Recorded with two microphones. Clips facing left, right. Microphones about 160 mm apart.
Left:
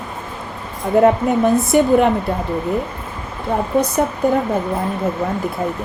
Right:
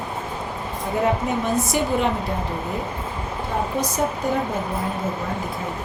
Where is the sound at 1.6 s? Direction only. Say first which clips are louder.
Left 9 dB; 55° left (ahead or behind).